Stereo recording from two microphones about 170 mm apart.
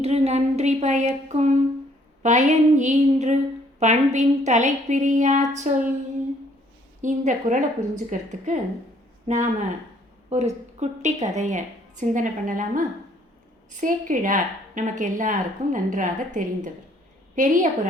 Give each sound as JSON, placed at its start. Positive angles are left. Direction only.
{"t": 0.0, "sound": "a woman's voice", "side_deg": -40}
{"t": 7.0, "sound": "a woman's voice", "side_deg": -45}